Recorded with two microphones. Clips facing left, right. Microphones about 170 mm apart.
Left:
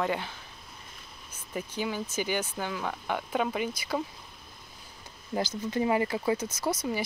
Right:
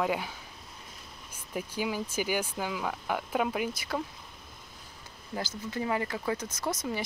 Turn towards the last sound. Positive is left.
turn(degrees=5)  # may be behind; listen again after turning